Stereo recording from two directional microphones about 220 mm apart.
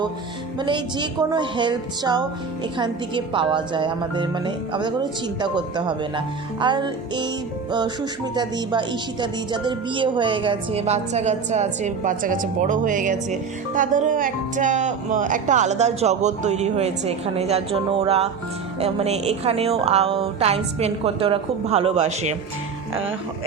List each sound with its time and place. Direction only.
0.6 s a woman's voice: 20° right (ahead or behind)